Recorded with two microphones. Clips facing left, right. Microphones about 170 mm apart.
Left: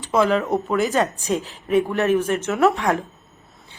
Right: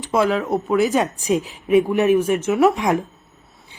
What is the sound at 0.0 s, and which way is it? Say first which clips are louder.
A woman's voice: even; 10° right (ahead or behind).